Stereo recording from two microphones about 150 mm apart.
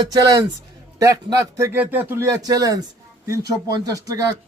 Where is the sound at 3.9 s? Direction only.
25° right (ahead or behind).